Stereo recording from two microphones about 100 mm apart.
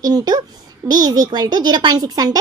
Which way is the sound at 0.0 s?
45° right (ahead or behind).